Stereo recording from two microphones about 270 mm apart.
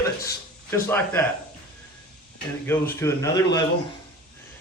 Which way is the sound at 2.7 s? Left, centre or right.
Centre.